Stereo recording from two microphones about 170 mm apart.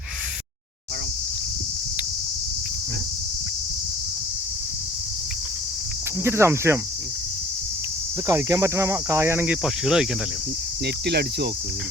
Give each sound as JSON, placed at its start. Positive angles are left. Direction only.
{"t": 6.2, "sound": "speech", "side_deg": -15}
{"t": 8.3, "sound": "speech", "side_deg": -20}
{"t": 10.8, "sound": "cricket", "side_deg": -75}